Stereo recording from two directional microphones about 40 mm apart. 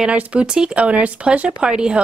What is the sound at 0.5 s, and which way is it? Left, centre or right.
Speech, right.